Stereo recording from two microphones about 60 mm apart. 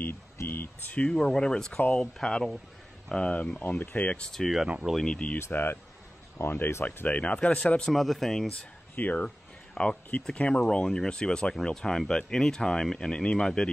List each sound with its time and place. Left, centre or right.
0.5 s a sound: left
1.1 s speech: centre; by 4.3 s left
4.3 s speech: centre
5.5 s speech: left
7.1 s speech: left
7.9 s speech: centre
8.9 s speech: left
9.8 s speech: centre